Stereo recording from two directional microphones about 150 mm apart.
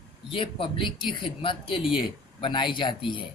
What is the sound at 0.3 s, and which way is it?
Speech, 35° left (ahead or behind).